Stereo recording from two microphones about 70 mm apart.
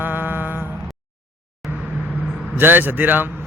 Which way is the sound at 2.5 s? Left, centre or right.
Right.